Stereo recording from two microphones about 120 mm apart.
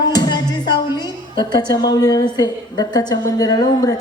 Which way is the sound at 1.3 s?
40° left (ahead or behind).